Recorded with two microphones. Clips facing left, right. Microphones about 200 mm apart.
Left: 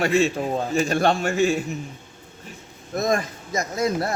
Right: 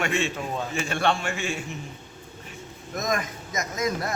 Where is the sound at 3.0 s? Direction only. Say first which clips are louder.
Left 5 dB; 30° left (ahead or behind).